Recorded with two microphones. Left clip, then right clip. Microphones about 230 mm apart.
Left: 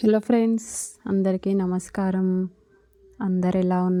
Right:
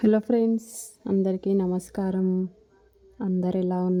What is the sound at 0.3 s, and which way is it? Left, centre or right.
Speech, left.